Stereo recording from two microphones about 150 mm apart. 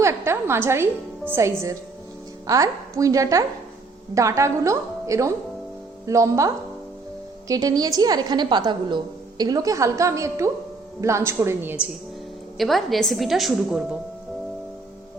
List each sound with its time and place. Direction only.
0.0 s a woman's voice: 15° right (ahead or behind)
12.5 s a woman's voice: centre (ahead or behind)